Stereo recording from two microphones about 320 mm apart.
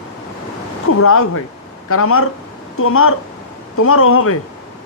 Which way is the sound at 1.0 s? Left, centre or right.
Left.